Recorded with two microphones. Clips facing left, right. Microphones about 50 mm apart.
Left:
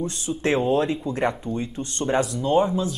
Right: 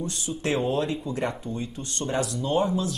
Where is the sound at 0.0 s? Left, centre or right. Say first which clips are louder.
Left 4 dB; left.